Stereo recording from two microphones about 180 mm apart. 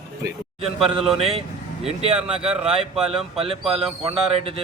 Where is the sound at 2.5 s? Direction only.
5° right (ahead or behind).